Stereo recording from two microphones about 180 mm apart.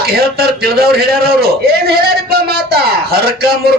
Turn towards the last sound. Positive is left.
turn(degrees=-60)  # may be behind; listen again after turning